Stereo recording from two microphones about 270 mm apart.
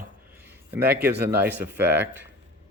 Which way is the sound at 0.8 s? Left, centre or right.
Right.